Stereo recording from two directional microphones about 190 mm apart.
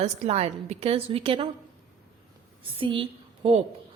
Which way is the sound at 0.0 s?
35° right (ahead or behind).